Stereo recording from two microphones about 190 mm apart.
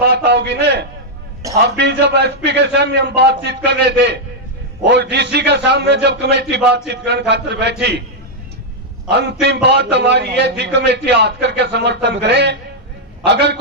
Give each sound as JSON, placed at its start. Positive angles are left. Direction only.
{"t": 0.0, "sound": "a man's voice", "side_deg": -60}
{"t": 5.1, "sound": "a man's voice", "side_deg": -60}
{"t": 9.0, "sound": "a man's voice", "side_deg": -65}